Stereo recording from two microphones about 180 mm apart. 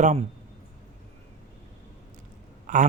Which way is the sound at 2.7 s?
45° right (ahead or behind).